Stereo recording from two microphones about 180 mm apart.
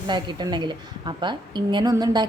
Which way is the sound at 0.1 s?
25° right (ahead or behind).